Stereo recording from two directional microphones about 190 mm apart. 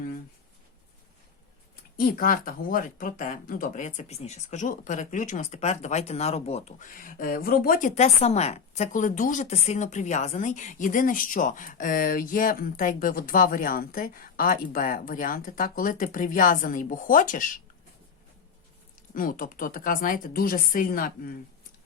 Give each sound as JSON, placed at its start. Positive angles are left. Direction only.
{"t": 2.0, "sound": "speech", "side_deg": 45}
{"t": 6.9, "sound": "a woman's voice", "side_deg": 50}
{"t": 19.1, "sound": "a woman's voice", "side_deg": 45}